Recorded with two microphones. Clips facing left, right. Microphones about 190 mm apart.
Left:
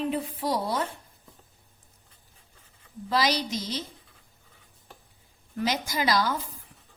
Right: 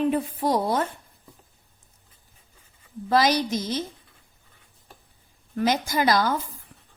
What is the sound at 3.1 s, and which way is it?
Speech, 50° right (ahead or behind).